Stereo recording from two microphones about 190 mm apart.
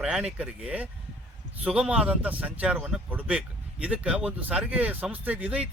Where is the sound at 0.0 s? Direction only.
5° right (ahead or behind).